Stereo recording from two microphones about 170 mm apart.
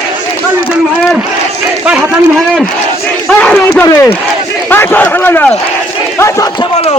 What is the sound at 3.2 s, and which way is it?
Speech, 5° left (ahead or behind).